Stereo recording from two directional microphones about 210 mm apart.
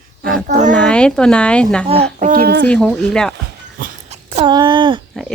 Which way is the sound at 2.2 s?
45° right (ahead or behind).